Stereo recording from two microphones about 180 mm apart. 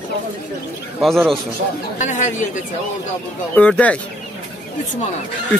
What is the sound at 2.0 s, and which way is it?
Speech, 45° left (ahead or behind).